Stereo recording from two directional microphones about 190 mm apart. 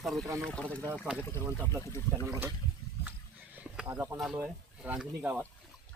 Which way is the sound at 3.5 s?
5° right (ahead or behind).